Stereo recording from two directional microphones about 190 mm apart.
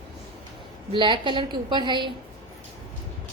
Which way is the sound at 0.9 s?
25° right (ahead or behind).